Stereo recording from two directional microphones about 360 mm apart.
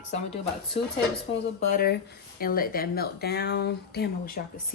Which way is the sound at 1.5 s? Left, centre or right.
Left.